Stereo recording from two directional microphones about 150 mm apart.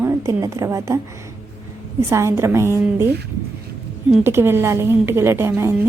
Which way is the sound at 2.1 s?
20° right (ahead or behind).